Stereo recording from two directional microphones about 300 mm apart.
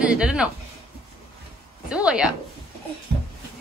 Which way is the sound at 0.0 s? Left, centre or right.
Centre.